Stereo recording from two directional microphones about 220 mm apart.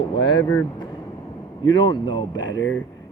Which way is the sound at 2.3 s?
55° left (ahead or behind).